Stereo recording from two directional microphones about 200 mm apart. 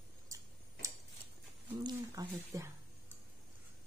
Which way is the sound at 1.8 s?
15° right (ahead or behind).